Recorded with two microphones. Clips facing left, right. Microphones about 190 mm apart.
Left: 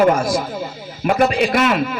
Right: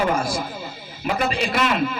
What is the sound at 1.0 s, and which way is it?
Speech, 50° left (ahead or behind).